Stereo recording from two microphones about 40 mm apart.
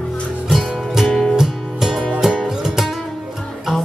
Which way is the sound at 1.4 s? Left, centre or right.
Centre.